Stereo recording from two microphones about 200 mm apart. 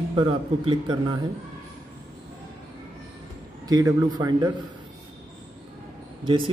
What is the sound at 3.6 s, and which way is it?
Speech, 20° right (ahead or behind).